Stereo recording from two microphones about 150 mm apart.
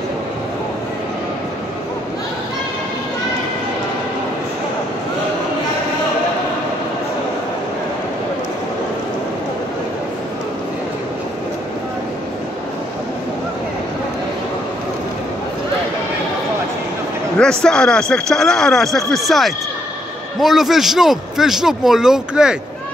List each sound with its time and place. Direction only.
17.4 s a man's voice: 5° left (ahead or behind)